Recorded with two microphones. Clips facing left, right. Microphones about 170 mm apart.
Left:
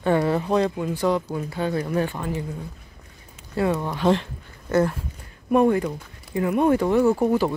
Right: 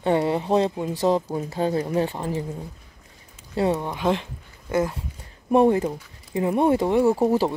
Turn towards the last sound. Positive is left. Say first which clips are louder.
# even
turn(degrees=-30)  # may be behind; listen again after turning